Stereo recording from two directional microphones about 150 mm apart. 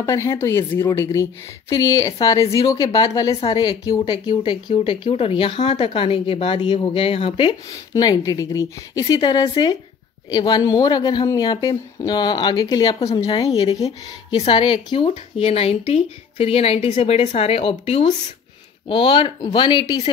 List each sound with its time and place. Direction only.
0.0 s speech: 20° left (ahead or behind); by 7.5 s 35° left (ahead or behind)
7.9 s speech: 25° left (ahead or behind)
14.3 s speech: 40° left (ahead or behind)